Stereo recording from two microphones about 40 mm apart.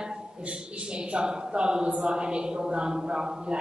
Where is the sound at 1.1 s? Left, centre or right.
Right.